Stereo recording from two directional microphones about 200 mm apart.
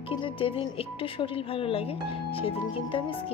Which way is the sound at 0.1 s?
25° left (ahead or behind).